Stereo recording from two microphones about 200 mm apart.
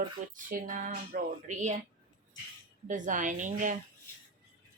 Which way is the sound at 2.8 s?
40° right (ahead or behind).